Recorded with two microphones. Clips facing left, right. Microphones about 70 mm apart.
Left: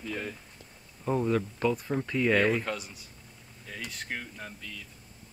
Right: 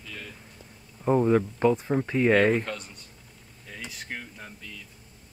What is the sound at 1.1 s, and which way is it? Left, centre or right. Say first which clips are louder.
Speech: right 6 dB; right.